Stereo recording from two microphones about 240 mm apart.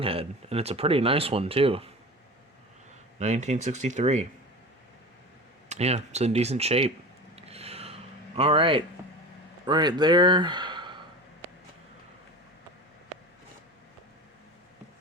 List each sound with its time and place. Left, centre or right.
0.0 s speech: right
3.2 s speech: right
5.6 s speech: right
7.3 s a sound: right
9.6 s speech: centre